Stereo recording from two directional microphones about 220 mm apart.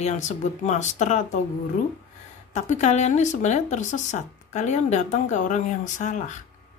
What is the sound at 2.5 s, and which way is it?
Speech, 30° left (ahead or behind).